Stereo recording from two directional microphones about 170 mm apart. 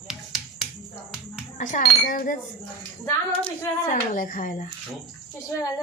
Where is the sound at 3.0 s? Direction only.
10° left (ahead or behind).